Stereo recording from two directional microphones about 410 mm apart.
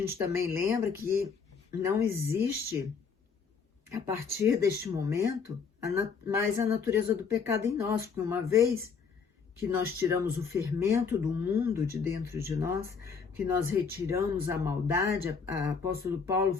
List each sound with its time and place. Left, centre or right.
0.2 s speech: centre
3.8 s speech: centre
10.0 s speech: centre